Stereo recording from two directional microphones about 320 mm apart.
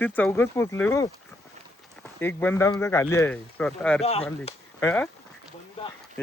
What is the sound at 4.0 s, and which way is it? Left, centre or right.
Speech, centre.